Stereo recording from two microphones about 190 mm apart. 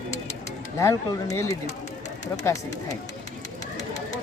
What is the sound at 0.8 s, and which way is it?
Speech, 15° left (ahead or behind).